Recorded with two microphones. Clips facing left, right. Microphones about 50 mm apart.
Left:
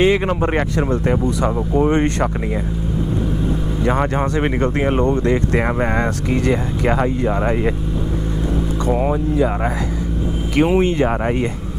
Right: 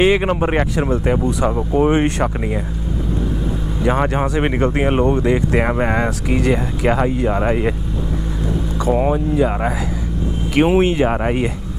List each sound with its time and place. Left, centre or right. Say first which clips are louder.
0.0 s speech: right 1 dB; centre
1.7 s speech: right 1 dB; right
3.8 s speech: right 1 dB; centre
8.8 s speech: right 3 dB; centre
10.6 s speech: right 1 dB; centre